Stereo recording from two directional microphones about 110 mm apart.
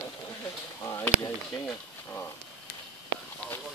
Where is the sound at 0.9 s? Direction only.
30° left (ahead or behind).